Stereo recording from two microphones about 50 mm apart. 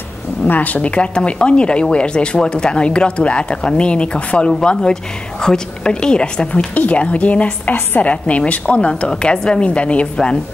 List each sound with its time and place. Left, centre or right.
0.5 s a woman's voice: left